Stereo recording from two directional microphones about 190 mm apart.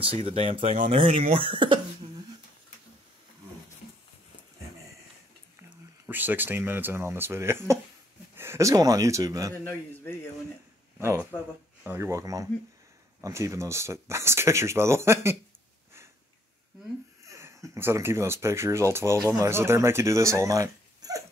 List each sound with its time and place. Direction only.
0.0 s speech: 30° right (ahead or behind)
6.0 s speech: 10° right (ahead or behind)
11.0 s speech: 15° right (ahead or behind)
17.3 s speech: 15° right (ahead or behind)